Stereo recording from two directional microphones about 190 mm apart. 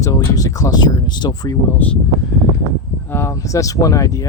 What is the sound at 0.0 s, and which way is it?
Speech, 15° left (ahead or behind).